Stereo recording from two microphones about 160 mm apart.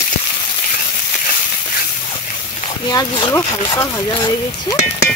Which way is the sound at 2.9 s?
25° left (ahead or behind).